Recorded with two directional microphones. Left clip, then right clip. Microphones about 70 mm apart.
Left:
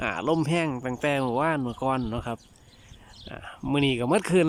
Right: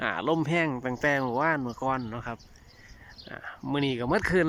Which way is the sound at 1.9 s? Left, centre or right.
Left.